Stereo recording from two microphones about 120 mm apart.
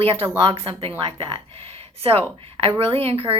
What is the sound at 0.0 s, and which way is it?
A woman's voice, 50° right (ahead or behind).